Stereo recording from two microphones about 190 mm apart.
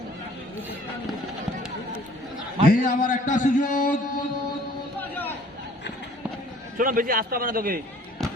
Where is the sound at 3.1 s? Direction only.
40° left (ahead or behind).